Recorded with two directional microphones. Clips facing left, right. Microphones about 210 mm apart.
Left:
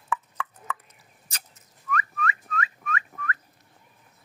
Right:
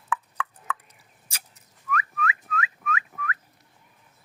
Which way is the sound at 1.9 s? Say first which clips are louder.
Even; 5° right (ahead or behind).